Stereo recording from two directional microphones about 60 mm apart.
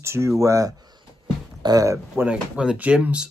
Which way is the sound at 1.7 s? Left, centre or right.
Right.